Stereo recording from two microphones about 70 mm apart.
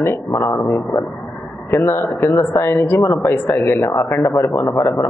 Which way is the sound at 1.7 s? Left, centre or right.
Left.